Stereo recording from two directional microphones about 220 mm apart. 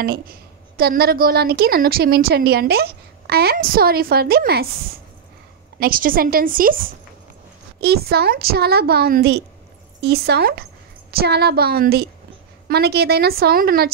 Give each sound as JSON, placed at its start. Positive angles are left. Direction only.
{"t": 0.0, "sound": "a woman's voice", "side_deg": -45}
{"t": 5.8, "sound": "a woman's voice", "side_deg": -40}